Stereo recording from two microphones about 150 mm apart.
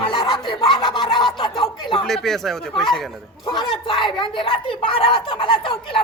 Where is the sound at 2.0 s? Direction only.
Centre (ahead or behind).